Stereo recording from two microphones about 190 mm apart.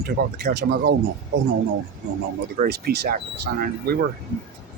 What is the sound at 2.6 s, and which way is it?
Speech, 55° right (ahead or behind).